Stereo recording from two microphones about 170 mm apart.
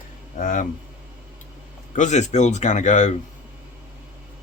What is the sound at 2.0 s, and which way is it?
Speech, 45° left (ahead or behind).